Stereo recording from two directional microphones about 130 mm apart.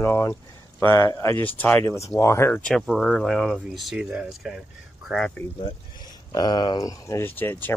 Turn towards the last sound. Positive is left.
turn(degrees=15)  # may be behind; listen again after turning